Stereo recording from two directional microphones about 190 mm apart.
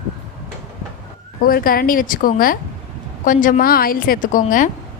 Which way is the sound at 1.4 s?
50° left (ahead or behind).